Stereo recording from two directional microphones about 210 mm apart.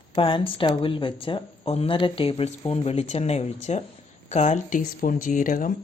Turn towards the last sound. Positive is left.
turn(degrees=40)  # may be behind; listen again after turning